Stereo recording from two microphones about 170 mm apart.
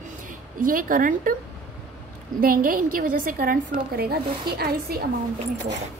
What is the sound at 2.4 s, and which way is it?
Speech, 55° right (ahead or behind).